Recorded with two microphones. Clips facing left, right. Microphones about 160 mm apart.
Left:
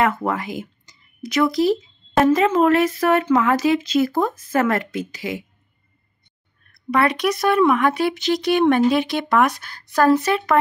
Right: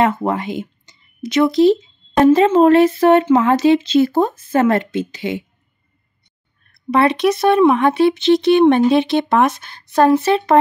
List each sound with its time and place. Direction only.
0.0 s speech: 25° right (ahead or behind)
6.7 s speech: 25° right (ahead or behind)